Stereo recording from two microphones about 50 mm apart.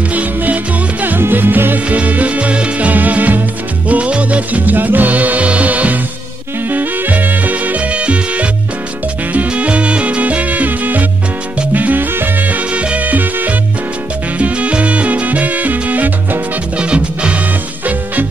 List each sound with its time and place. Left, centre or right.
0.1 s music: right
1.2 s music: right
1.9 s music: right
11.7 s salsa music: right
12.4 s music: right
16.7 s music: right